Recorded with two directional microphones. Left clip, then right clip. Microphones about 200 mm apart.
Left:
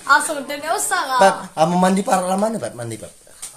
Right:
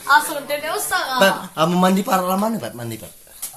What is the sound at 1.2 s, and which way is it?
Speech, 15° left (ahead or behind).